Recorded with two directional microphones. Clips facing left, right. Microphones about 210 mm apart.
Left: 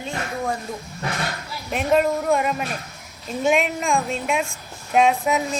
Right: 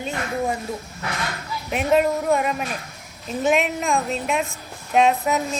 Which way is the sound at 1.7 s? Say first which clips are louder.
Even; 5° right (ahead or behind).